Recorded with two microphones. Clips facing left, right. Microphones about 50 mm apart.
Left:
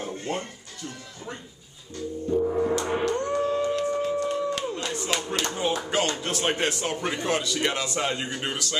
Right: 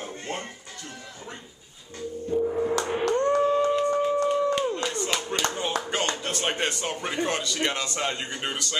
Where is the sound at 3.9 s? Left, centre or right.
Centre.